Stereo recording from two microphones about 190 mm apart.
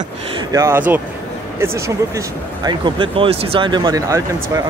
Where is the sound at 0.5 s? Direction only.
15° right (ahead or behind).